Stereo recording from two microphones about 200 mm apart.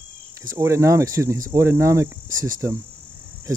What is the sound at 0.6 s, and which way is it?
Speech, 15° right (ahead or behind).